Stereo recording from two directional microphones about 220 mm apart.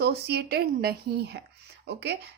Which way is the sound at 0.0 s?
45° right (ahead or behind).